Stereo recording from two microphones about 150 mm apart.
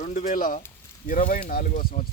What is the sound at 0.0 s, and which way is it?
Speech, 55° left (ahead or behind).